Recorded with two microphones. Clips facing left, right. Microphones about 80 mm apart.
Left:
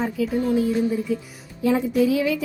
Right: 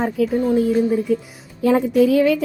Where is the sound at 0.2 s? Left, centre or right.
Right.